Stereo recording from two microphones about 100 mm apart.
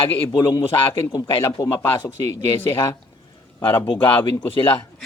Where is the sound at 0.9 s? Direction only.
35° left (ahead or behind).